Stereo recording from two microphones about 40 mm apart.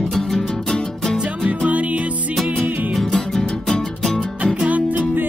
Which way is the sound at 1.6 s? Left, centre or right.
Right.